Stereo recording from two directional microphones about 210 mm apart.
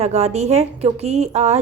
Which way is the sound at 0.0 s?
30° right (ahead or behind).